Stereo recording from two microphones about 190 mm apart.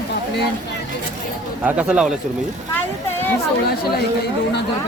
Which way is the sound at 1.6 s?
5° right (ahead or behind).